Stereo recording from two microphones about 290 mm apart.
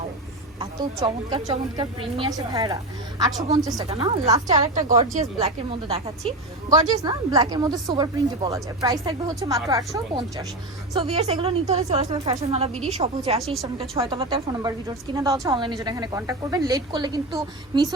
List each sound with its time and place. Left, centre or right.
0.6 s a woman's voice: centre